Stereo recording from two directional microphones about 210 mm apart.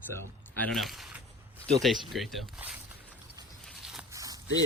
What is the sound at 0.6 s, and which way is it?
Speech, centre (ahead or behind).